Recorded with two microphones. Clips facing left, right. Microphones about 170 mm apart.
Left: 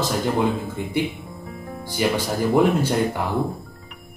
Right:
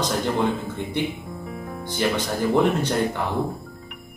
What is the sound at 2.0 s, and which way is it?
Speech, 10° left (ahead or behind).